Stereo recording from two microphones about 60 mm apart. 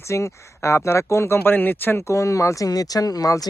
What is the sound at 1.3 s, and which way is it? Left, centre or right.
Speech, left.